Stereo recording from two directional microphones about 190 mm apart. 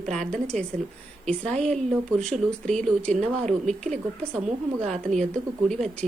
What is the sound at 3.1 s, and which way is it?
Speech, 35° right (ahead or behind).